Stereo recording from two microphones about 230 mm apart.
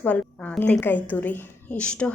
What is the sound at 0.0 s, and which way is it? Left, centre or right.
A woman's voice, centre.